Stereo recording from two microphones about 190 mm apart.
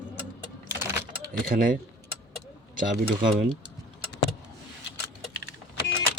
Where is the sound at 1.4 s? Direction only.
45° right (ahead or behind).